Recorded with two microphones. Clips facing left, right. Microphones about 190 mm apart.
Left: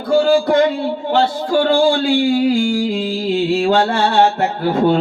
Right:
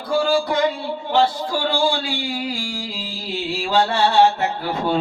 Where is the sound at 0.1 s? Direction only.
55° left (ahead or behind).